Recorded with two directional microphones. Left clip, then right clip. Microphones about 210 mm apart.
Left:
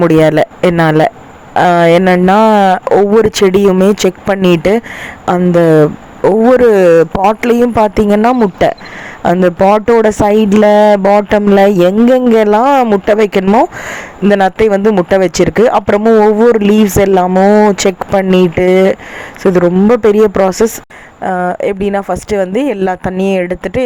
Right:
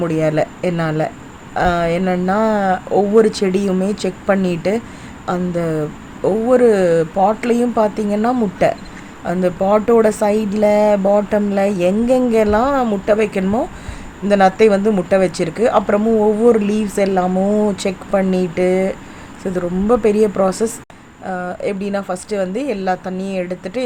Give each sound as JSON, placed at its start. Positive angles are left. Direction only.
{"t": 0.0, "sound": "speech", "side_deg": 40}